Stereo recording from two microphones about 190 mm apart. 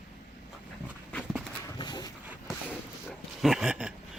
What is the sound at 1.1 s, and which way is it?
Horse, centre (ahead or behind).